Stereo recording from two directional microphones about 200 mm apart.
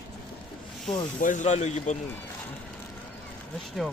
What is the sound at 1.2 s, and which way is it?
Speech, 40° left (ahead or behind).